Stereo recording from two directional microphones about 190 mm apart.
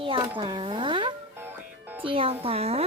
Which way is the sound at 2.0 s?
30° right (ahead or behind).